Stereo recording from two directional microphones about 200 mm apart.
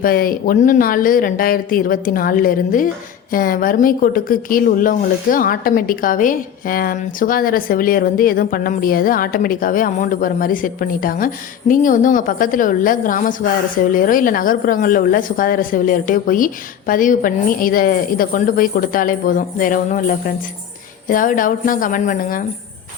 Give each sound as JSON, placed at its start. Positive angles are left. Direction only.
{"t": 0.0, "sound": "a woman's voice", "side_deg": 45}